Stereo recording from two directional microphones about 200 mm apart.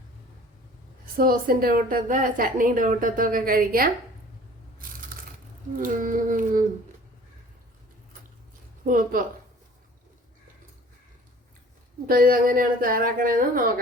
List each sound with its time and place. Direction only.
1.1 s a woman's voice: 45° right (ahead or behind)
5.1 s a sound: 45° right (ahead or behind)
5.7 s child singing: 40° right (ahead or behind)
8.8 s a woman's voice: 40° right (ahead or behind)
12.0 s a woman's voice: 45° right (ahead or behind)